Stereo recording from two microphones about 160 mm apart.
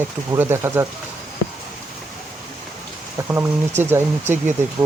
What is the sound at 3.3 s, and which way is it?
Speech, 15° right (ahead or behind).